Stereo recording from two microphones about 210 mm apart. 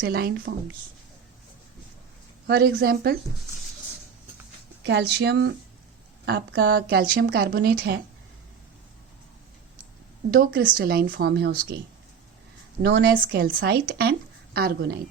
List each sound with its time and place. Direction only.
0.0 s a woman's voice: 50° right (ahead or behind)
2.5 s a woman's voice: 45° right (ahead or behind)
4.8 s a woman's voice: 55° right (ahead or behind)
10.3 s a woman's voice: 45° right (ahead or behind)
12.8 s a woman's voice: 55° right (ahead or behind)